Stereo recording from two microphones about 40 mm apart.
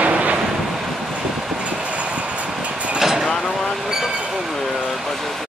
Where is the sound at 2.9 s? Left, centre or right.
Centre.